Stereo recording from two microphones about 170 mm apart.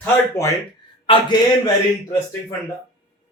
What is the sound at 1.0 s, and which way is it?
Speech, 30° left (ahead or behind).